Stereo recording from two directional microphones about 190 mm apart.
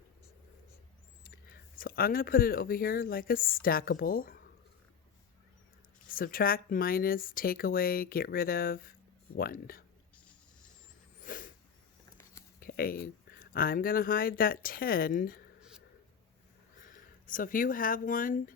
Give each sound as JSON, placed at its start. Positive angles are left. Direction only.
{"t": 1.8, "sound": "speech", "side_deg": 50}
{"t": 6.1, "sound": "speech", "side_deg": 50}
{"t": 11.2, "sound": "a sound", "side_deg": 45}
{"t": 12.5, "sound": "speech", "side_deg": 50}
{"t": 16.8, "sound": "speech", "side_deg": 45}